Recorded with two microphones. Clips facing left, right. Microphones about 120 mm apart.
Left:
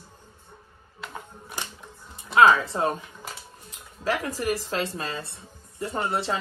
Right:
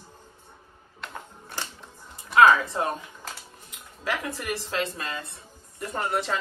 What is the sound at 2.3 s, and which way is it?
Speech, 30° left (ahead or behind).